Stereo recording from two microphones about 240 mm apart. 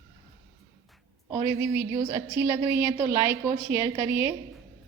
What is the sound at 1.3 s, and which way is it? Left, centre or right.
A woman's voice, centre.